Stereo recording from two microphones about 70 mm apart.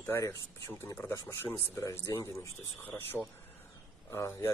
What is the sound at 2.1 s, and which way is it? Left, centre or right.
Speech, left.